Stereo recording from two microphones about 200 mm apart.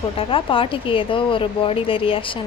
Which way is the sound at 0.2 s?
25° left (ahead or behind).